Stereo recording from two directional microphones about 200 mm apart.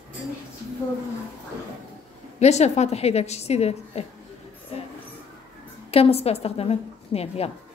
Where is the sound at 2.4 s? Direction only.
35° left (ahead or behind).